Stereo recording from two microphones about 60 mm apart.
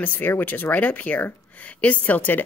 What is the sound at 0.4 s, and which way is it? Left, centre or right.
Speech, left.